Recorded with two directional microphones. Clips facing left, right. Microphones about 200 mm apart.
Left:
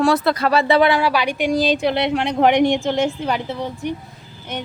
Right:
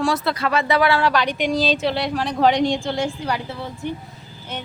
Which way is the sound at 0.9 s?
10° left (ahead or behind).